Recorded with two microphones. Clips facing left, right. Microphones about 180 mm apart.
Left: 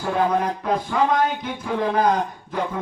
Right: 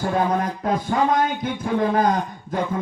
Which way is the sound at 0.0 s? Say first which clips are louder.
Even; 45° right (ahead or behind).